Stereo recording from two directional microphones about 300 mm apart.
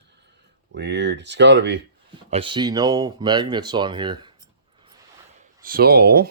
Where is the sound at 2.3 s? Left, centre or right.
Centre.